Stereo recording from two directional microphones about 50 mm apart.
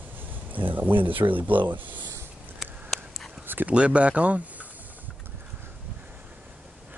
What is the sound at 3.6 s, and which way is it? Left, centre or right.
Speech, right.